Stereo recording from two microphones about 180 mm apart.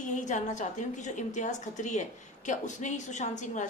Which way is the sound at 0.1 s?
45° left (ahead or behind).